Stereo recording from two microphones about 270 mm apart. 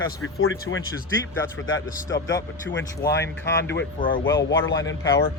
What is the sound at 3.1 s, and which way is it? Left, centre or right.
Speech, left.